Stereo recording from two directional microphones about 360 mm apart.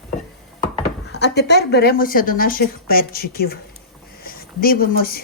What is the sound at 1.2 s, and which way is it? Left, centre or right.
A woman's voice, left.